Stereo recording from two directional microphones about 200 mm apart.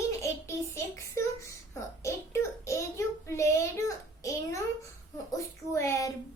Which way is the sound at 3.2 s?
15° left (ahead or behind).